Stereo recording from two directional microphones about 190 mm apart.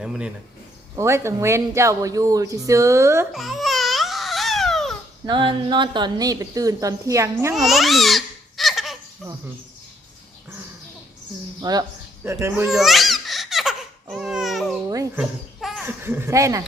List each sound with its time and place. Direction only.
0.0 s speech: 5° right (ahead or behind)
0.9 s speech: 15° right (ahead or behind)
3.3 s babbling: centre (ahead or behind)
5.2 s a woman's voice: 25° right (ahead or behind)
7.5 s babbling: centre (ahead or behind)
11.6 s speech: 20° right (ahead or behind)
12.6 s laughter: centre (ahead or behind)
14.8 s a sound: 20° right (ahead or behind)
15.2 s a sound: 5° right (ahead or behind)
16.0 s speech: 10° right (ahead or behind)